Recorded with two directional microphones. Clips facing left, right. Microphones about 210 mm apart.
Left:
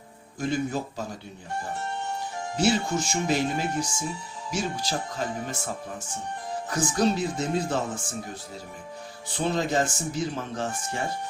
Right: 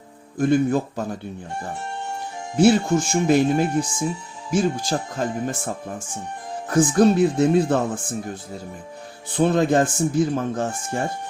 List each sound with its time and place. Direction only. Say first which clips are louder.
0.3 s speech: right 9 dB; 55° right (ahead or behind)
2.6 s speech: right 8 dB; 55° right (ahead or behind)
9.3 s speech: right 8 dB; 55° right (ahead or behind)